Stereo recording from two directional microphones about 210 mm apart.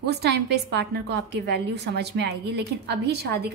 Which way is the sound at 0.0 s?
50° right (ahead or behind).